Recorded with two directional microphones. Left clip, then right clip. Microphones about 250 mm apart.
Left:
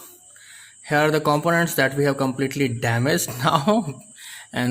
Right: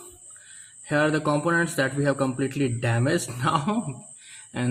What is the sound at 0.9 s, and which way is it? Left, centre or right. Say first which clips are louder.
Speech: left 4 dB; left.